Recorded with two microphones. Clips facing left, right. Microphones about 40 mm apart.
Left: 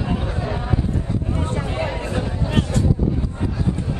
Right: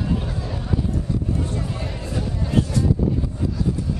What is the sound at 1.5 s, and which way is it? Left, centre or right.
Vehicle, left.